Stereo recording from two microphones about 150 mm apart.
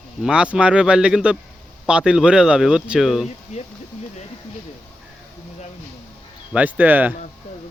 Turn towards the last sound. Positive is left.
turn(degrees=-10)  # may be behind; listen again after turning